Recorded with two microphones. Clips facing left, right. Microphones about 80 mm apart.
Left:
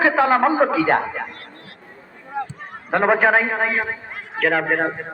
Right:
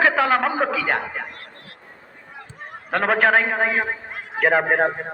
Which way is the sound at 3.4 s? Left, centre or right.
Centre.